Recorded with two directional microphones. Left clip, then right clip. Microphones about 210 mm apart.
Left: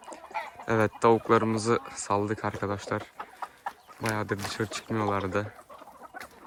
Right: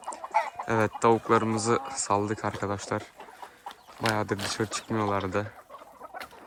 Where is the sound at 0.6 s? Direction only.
5° right (ahead or behind).